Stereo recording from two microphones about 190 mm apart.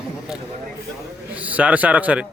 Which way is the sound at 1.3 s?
5° right (ahead or behind).